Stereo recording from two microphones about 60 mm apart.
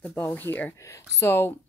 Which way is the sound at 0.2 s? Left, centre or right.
Left.